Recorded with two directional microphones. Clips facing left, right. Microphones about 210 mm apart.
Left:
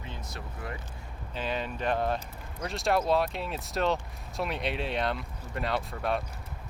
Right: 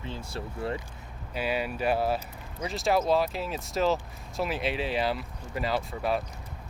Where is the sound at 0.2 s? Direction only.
30° right (ahead or behind).